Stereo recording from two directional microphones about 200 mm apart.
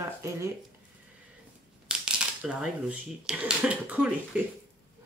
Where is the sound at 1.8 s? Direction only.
5° right (ahead or behind).